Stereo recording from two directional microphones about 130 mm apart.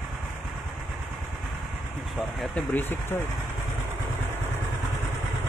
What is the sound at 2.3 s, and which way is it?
Speech, 10° left (ahead or behind).